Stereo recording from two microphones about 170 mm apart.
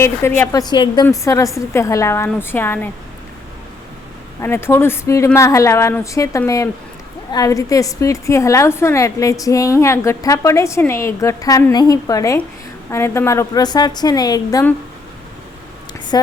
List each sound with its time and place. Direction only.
0.0 s speech: 15° left (ahead or behind)
0.7 s a woman's voice: 25° left (ahead or behind)
4.4 s a woman's voice: 15° left (ahead or behind)
16.1 s a woman's voice: 25° left (ahead or behind)